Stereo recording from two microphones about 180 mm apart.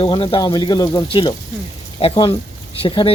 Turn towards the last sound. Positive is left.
turn(degrees=30)  # may be behind; listen again after turning